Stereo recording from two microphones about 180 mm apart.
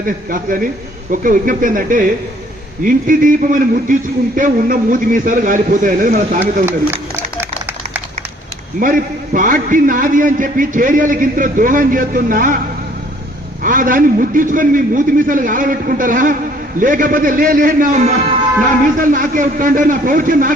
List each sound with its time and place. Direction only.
0.0 s a man's voice: 50° right (ahead or behind)
6.4 s a sound: 10° right (ahead or behind)
8.8 s a man's voice: 50° right (ahead or behind)
13.6 s a man's voice: 50° right (ahead or behind)